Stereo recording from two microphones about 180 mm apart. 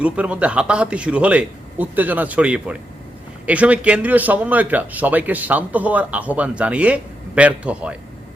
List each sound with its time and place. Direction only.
0.0 s a man's voice: 5° right (ahead or behind)